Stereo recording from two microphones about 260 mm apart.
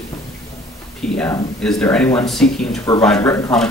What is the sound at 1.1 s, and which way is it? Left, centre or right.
Speech, centre.